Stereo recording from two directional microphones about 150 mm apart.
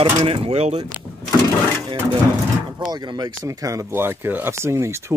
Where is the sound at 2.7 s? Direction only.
30° right (ahead or behind).